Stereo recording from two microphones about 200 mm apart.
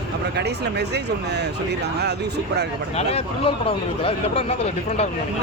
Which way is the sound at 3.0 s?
30° left (ahead or behind).